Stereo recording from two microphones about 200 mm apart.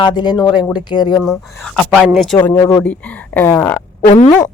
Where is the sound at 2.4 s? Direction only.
10° left (ahead or behind).